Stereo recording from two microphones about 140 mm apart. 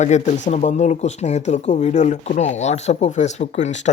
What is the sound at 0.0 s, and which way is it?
Speech, 55° left (ahead or behind).